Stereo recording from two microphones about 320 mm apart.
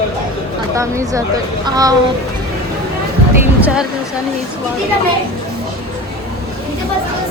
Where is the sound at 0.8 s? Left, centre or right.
Centre.